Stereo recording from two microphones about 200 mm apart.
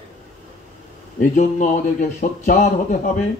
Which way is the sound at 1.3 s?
40° left (ahead or behind).